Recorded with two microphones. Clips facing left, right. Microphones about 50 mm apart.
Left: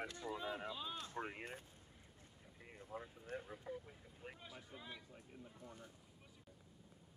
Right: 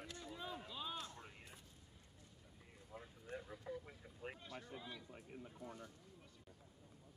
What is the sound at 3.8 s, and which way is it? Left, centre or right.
Speech, centre.